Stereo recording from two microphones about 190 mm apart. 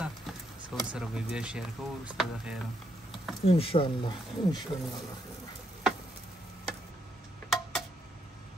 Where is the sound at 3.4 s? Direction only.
30° left (ahead or behind).